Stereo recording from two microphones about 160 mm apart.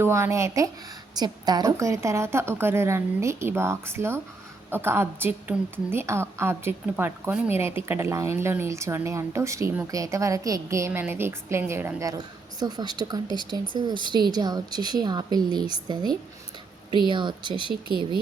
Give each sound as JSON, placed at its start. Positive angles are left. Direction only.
{"t": 0.0, "sound": "a woman's voice", "side_deg": -15}